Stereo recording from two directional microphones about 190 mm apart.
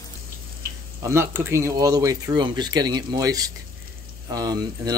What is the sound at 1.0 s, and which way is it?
Speech, 15° right (ahead or behind).